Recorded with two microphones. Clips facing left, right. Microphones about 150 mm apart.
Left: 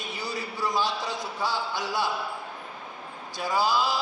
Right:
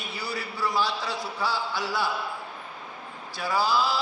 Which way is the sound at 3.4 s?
15° left (ahead or behind).